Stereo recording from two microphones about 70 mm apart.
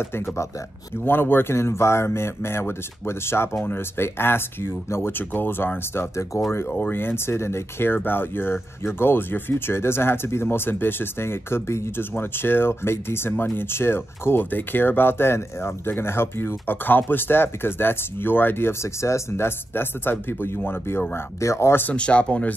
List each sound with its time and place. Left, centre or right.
0.0 s speech: left
6.7 s speech: left
21.8 s speech: centre